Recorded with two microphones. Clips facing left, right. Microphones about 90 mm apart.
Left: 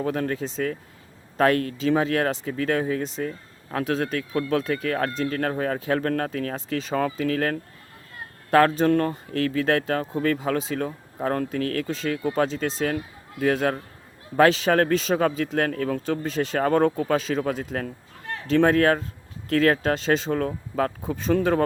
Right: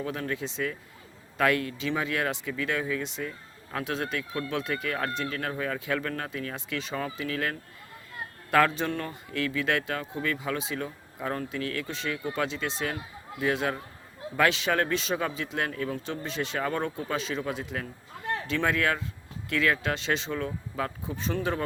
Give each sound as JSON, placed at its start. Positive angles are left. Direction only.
{"t": 0.0, "sound": "speech", "side_deg": 45}